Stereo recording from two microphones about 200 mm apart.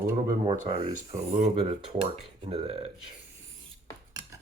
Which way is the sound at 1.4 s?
35° right (ahead or behind).